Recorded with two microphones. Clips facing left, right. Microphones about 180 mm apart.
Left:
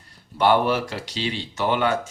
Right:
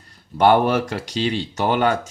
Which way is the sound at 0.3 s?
45° right (ahead or behind).